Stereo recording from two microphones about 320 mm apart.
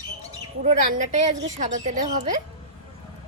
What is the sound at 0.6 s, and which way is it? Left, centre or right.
A woman's voice, right.